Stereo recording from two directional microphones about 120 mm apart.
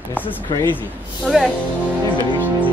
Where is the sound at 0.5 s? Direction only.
35° left (ahead or behind).